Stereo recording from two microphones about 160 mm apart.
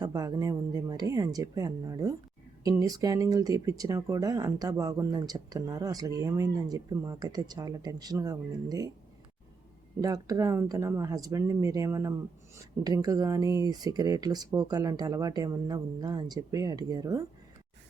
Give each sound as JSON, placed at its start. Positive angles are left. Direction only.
{"t": 0.0, "sound": "speech", "side_deg": -25}
{"t": 10.0, "sound": "speech", "side_deg": -20}